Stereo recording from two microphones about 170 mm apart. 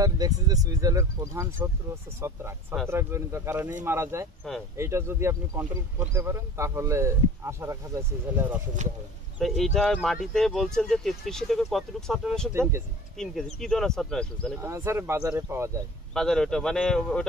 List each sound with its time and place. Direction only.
0.0 s speech: 20° right (ahead or behind)
2.9 s speech: 15° right (ahead or behind)
8.8 s speech: 45° right (ahead or behind)
9.4 s speech: centre (ahead or behind)
14.6 s speech: 15° right (ahead or behind)
16.1 s speech: 5° left (ahead or behind)